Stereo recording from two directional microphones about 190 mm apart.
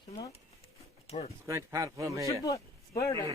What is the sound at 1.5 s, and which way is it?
Speech, 15° right (ahead or behind).